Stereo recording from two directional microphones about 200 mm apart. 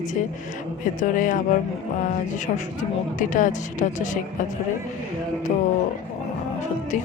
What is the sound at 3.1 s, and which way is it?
A woman's voice, 40° left (ahead or behind).